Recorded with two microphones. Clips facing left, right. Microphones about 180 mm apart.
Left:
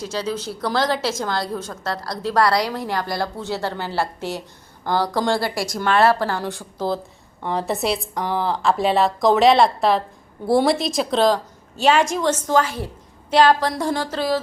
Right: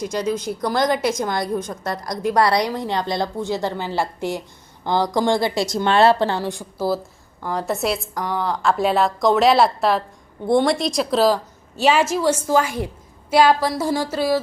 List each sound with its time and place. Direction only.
0.0 s a woman's voice: 15° right (ahead or behind)
6.4 s a woman's voice: 15° right (ahead or behind)